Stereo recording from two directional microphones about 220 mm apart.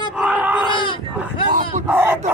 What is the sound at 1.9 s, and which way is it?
Speech, 10° right (ahead or behind).